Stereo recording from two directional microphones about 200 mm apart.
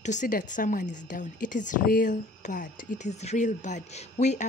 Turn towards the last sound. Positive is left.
turn(degrees=35)  # may be behind; listen again after turning